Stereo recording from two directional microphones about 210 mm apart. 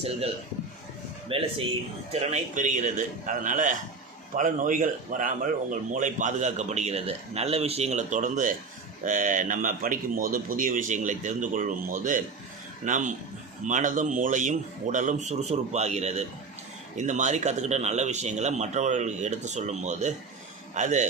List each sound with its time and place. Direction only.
1.3 s speech: 25° right (ahead or behind)